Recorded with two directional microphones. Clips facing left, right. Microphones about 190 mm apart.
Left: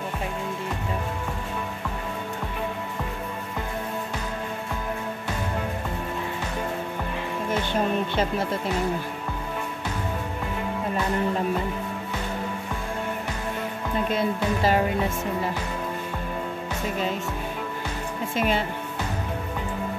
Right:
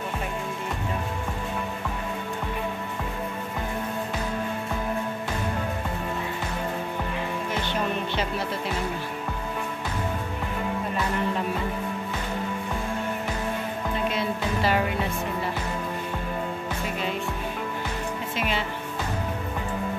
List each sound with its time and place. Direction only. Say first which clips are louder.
14.1 s music: left 3 dB; 45° left (ahead or behind)
18.3 s speech: left 6 dB; 45° left (ahead or behind)